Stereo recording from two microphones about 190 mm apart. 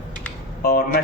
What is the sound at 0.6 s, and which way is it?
Speech, 50° left (ahead or behind).